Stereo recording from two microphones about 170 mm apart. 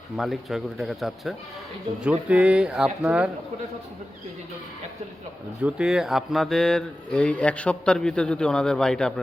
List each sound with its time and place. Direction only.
0.2 s speech: centre (ahead or behind)
5.6 s speech: 5° right (ahead or behind)